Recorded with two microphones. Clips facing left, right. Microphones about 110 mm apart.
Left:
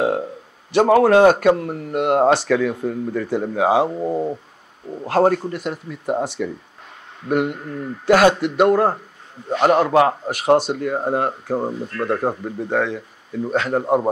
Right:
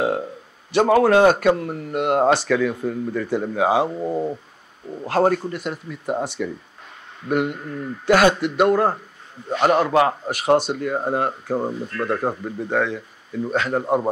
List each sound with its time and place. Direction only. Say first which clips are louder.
0.8 s speech: left 2 dB; 50° left (ahead or behind)
3.5 s speech: left 2 dB; 55° left (ahead or behind)
3.9 s speech: left 2 dB; 15° left (ahead or behind)
5.0 s speech: left 2 dB; 50° left (ahead or behind)
6.0 s speech: left 2 dB; 30° left (ahead or behind)
7.2 s a man's voice: left 2 dB; 50° left (ahead or behind)
8.1 s a man's voice: left 2 dB; 60° left (ahead or behind)